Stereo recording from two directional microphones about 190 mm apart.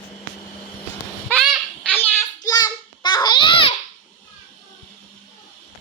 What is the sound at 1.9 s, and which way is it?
Babbling, 10° left (ahead or behind).